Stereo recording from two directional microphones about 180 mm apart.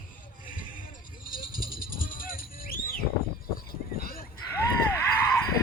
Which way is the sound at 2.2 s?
50° left (ahead or behind).